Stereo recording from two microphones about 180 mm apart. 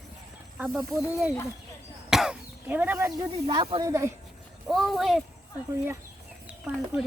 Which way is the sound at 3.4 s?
30° right (ahead or behind).